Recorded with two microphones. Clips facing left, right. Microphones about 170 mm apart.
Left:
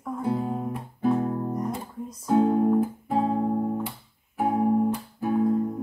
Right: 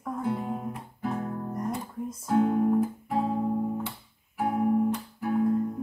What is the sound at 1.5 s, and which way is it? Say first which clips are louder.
Guitar: left 2 dB; centre (ahead or behind).